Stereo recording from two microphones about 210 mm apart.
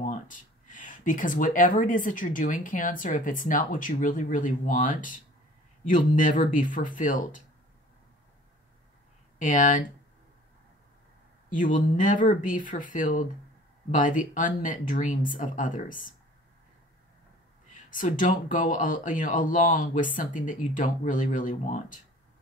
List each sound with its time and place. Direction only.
0.0 s speech: 35° left (ahead or behind)
9.4 s speech: 40° left (ahead or behind)
11.5 s speech: 40° left (ahead or behind)
17.7 s speech: 40° left (ahead or behind)